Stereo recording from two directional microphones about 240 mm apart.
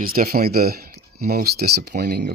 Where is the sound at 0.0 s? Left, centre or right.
Right.